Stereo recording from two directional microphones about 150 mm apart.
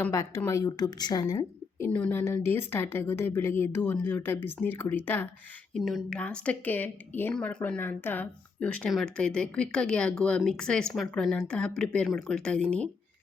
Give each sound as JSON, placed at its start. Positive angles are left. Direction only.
{"t": 0.0, "sound": "a woman's voice", "side_deg": 20}
{"t": 1.9, "sound": "a woman's voice", "side_deg": 10}
{"t": 5.7, "sound": "a woman's voice", "side_deg": 0}